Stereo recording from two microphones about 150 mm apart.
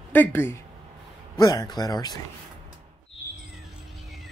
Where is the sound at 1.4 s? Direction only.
25° left (ahead or behind).